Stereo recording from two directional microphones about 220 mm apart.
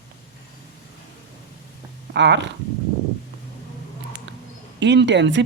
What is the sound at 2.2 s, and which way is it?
Speech, 55° right (ahead or behind).